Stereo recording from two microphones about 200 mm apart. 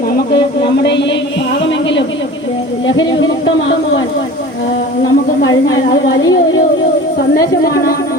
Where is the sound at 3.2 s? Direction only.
70° left (ahead or behind).